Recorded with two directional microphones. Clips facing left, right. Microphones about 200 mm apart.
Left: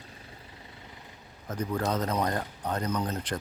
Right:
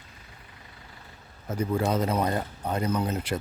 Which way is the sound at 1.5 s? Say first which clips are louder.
Right 3 dB; 10° right (ahead or behind).